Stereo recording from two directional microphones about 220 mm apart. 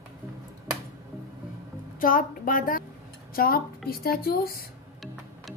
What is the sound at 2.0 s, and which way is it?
A woman's voice, 40° left (ahead or behind).